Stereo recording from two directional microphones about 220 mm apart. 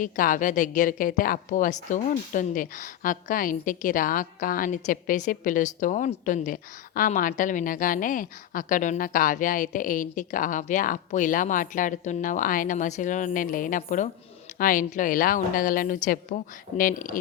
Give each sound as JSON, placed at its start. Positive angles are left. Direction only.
{"t": 0.0, "sound": "a woman's voice", "side_deg": 35}